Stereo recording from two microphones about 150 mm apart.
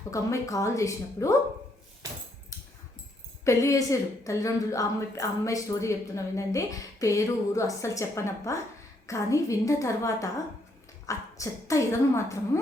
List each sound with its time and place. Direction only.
0.1 s a woman's voice: 20° left (ahead or behind)
2.0 s a sound: 25° right (ahead or behind)
3.4 s a woman's voice: 20° left (ahead or behind)